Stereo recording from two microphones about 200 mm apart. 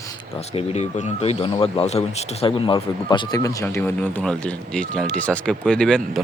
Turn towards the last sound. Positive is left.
turn(degrees=5)  # may be behind; listen again after turning